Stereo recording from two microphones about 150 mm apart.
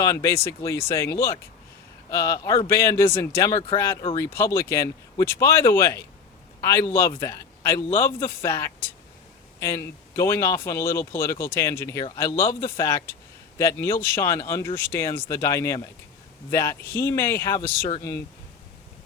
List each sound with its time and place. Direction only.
0.0 s speech: 20° left (ahead or behind)